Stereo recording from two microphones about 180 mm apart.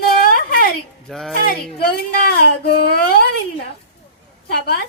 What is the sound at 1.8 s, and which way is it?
Speech, 60° left (ahead or behind).